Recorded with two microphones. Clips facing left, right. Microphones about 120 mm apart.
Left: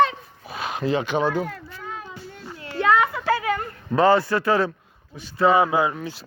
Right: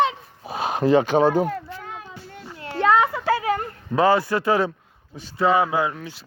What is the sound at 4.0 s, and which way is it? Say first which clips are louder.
Speech: left 1 dB; 10° right (ahead or behind).